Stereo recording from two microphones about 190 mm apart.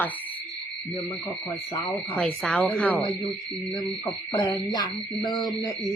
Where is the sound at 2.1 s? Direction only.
5° left (ahead or behind).